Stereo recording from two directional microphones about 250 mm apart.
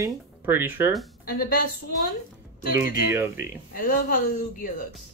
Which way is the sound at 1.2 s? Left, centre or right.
Left.